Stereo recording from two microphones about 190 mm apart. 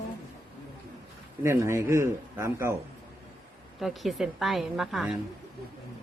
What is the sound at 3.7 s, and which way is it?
A woman's voice, centre (ahead or behind).